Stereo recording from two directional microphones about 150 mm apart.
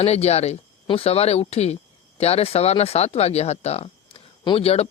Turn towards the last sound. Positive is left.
turn(degrees=40)  # may be behind; listen again after turning